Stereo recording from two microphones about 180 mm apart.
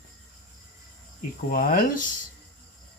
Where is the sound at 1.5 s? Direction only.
50° left (ahead or behind).